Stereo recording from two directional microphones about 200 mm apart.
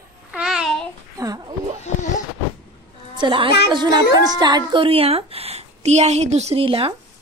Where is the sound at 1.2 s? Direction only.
20° right (ahead or behind).